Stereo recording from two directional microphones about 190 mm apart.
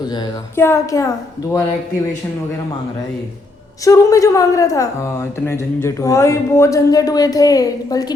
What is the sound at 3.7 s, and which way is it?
A woman's voice, 15° left (ahead or behind).